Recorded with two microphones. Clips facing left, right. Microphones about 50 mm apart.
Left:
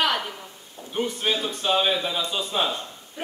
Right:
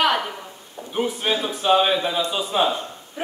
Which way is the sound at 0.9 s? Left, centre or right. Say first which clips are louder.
Right 3 dB; centre.